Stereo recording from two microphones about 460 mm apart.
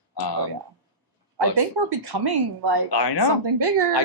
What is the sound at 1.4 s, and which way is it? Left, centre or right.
Speech, right.